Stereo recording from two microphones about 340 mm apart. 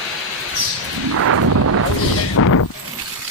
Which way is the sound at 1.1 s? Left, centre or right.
Right.